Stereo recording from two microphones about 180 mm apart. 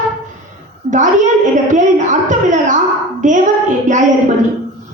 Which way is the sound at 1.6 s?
45° right (ahead or behind).